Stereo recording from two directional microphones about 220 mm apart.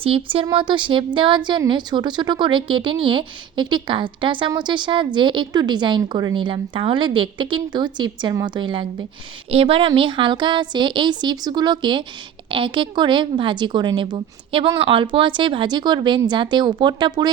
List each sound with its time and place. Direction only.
0.0 s a woman's voice: 25° right (ahead or behind)